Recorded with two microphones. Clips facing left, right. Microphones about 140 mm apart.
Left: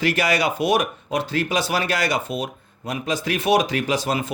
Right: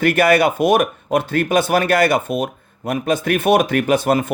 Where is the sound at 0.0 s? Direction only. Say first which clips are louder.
Right 7 dB; 55° right (ahead or behind).